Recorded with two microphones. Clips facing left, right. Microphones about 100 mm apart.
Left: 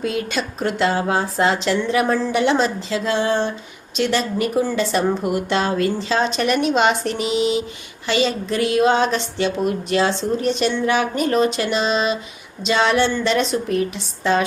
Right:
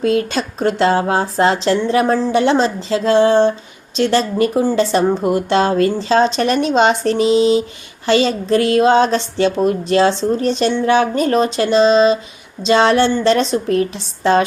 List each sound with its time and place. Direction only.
0.3 s speech: 30° right (ahead or behind)